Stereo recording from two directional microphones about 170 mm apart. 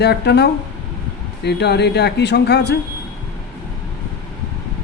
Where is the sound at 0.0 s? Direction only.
75° left (ahead or behind).